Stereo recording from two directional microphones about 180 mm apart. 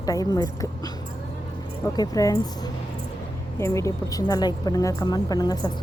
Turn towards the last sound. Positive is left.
turn(degrees=20)  # may be behind; listen again after turning